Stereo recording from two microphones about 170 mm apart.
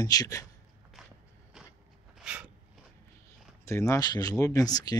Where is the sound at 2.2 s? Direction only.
5° right (ahead or behind).